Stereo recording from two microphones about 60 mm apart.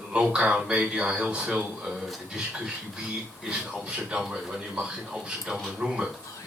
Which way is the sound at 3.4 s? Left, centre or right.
Centre.